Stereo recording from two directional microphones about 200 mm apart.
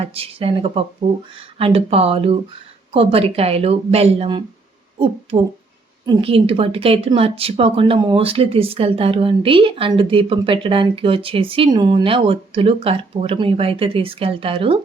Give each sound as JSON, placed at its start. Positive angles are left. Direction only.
{"t": 0.0, "sound": "speech", "side_deg": -30}
{"t": 6.1, "sound": "speech", "side_deg": -25}